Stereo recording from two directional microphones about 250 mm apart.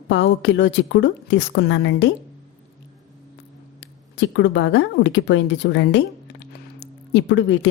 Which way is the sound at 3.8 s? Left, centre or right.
Left.